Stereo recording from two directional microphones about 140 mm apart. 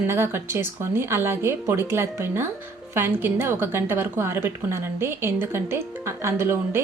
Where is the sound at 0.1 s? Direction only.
15° right (ahead or behind).